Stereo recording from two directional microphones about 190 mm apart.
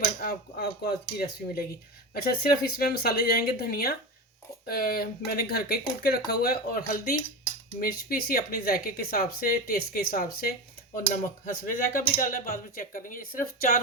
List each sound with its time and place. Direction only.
0.0 s speech: 55° left (ahead or behind)